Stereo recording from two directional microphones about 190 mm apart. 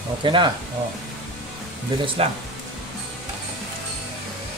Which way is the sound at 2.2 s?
30° right (ahead or behind).